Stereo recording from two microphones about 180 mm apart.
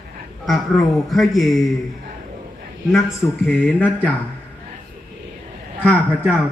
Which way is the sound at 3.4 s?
10° left (ahead or behind).